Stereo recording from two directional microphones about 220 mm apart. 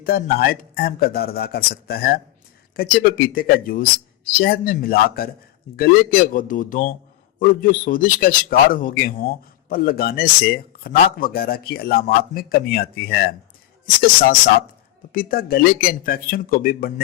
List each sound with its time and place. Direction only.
0.0 s a man's voice: 45° left (ahead or behind)